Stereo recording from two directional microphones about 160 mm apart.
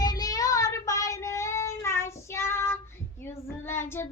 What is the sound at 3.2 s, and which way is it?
Child singing, 15° left (ahead or behind).